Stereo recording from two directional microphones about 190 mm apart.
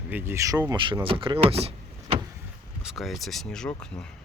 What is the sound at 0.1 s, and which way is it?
Speech, 10° right (ahead or behind).